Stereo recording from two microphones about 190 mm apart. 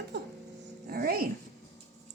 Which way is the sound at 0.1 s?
65° right (ahead or behind).